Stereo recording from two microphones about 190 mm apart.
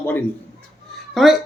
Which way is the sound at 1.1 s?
Centre (ahead or behind).